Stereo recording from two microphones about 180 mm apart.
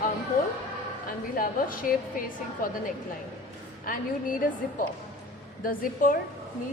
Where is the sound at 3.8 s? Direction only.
50° left (ahead or behind).